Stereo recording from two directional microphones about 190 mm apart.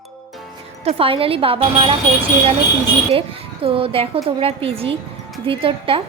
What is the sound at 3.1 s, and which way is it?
A woman's voice, 30° right (ahead or behind).